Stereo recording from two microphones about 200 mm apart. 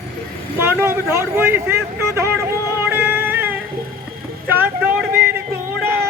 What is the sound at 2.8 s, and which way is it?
Music, 10° right (ahead or behind).